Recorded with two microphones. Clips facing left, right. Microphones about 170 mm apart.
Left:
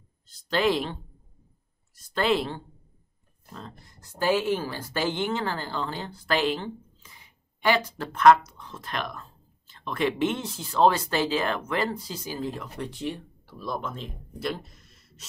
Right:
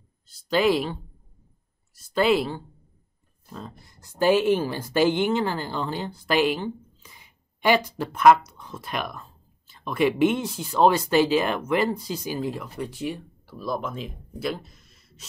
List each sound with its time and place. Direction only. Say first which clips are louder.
0.5 s speech: right 3 dB; 5° right (ahead or behind)
2.0 s speech: right 4 dB; 5° right (ahead or behind)
4.2 s speech: right 5 dB; 20° right (ahead or behind); by 15.2 s centre (ahead or behind)